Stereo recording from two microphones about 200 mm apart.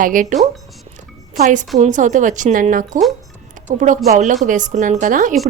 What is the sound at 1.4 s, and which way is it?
A woman's voice, 40° right (ahead or behind).